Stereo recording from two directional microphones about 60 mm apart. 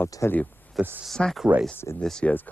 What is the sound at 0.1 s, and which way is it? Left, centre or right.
Speech, left.